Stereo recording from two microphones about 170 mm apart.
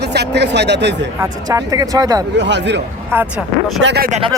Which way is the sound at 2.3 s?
90° right.